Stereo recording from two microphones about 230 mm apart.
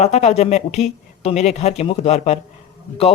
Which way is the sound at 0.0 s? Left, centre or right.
Left.